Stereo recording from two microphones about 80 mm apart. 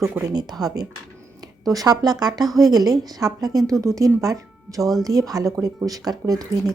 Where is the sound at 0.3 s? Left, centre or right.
Right.